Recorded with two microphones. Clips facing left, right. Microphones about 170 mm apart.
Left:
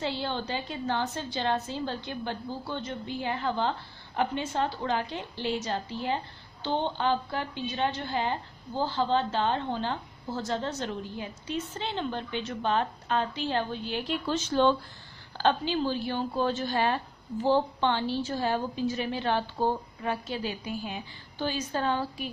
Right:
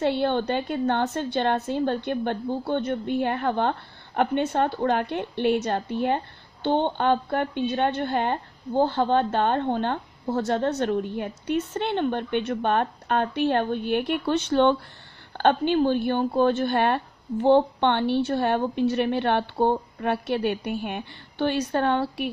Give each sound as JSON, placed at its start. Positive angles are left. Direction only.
{"t": 0.0, "sound": "a woman's voice", "side_deg": -60}